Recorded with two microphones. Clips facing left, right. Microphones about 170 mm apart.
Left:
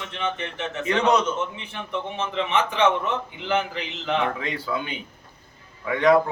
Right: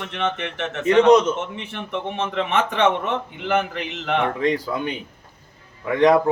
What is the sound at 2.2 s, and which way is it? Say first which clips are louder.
A man's voice: right 2 dB; 55° right (ahead or behind).